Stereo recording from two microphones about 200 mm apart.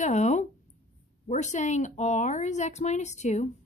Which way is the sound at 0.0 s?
35° left (ahead or behind).